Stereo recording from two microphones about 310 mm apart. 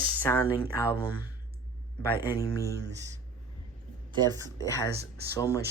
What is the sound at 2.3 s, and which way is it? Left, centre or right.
Speech, centre.